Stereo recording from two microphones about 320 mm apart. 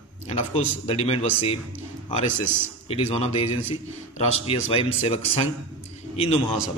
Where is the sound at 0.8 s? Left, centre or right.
Centre.